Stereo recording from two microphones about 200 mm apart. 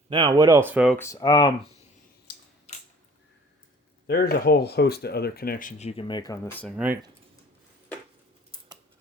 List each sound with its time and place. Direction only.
0.1 s speech: 25° right (ahead or behind); by 0.9 s 5° right (ahead or behind)
0.9 s speech: 15° left (ahead or behind)
4.0 s speech: 50° left (ahead or behind)
6.0 s speech: 20° left (ahead or behind)
6.7 s speech: 10° right (ahead or behind)